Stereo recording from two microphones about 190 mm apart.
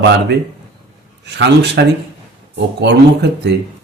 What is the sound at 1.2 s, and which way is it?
Speech, 65° right (ahead or behind).